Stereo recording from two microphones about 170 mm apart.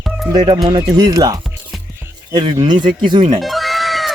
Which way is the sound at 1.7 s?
Centre (ahead or behind).